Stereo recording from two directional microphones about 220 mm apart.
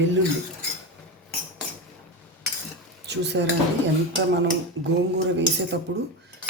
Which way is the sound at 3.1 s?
50° right (ahead or behind).